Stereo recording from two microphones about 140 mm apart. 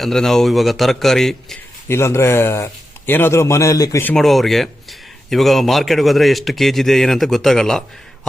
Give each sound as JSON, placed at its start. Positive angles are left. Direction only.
{"t": 0.0, "sound": "a man's voice", "side_deg": 5}
{"t": 1.9, "sound": "a man's voice", "side_deg": 20}
{"t": 4.1, "sound": "a man's voice", "side_deg": 0}